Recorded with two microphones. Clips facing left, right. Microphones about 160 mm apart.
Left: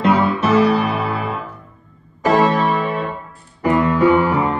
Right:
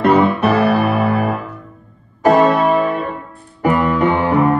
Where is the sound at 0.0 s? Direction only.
60° right (ahead or behind).